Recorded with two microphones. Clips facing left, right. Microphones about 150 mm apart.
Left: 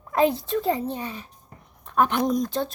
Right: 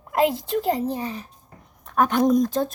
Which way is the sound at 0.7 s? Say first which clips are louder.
Right 3 dB; 35° right (ahead or behind).